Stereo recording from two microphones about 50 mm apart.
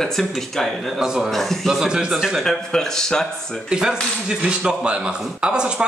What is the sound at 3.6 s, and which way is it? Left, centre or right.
Speech, centre.